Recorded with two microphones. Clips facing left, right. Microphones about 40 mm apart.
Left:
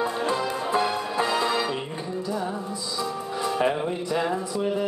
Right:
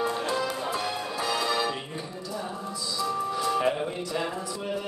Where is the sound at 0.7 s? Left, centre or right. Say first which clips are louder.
Left 6 dB; left.